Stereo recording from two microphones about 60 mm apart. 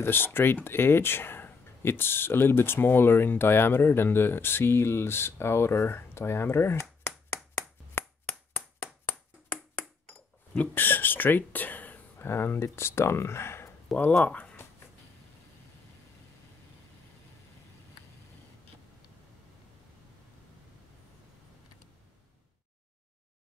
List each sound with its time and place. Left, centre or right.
0.0 s speech: left
9.0 s ping: left
10.7 s speech: left
12.2 s speech: left
13.9 s speech: centre
14.2 s speech: left